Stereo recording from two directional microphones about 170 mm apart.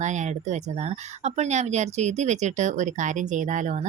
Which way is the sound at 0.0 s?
45° right (ahead or behind).